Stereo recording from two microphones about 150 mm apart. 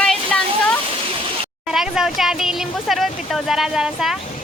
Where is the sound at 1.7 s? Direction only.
5° right (ahead or behind).